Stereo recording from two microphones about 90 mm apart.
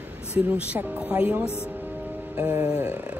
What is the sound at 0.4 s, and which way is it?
Speech, 10° right (ahead or behind).